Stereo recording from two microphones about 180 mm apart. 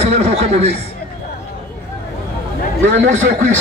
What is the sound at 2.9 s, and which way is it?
Speech, 90° right.